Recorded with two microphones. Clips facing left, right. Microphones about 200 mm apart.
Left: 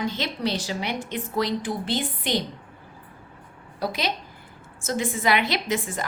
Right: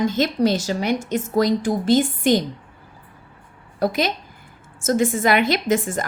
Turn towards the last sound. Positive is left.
turn(degrees=-45)  # may be behind; listen again after turning